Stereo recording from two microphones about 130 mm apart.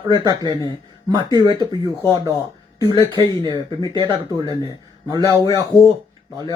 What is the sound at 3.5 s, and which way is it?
Speech, 35° left (ahead or behind).